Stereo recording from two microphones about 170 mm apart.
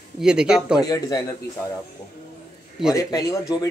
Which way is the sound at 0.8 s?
20° left (ahead or behind).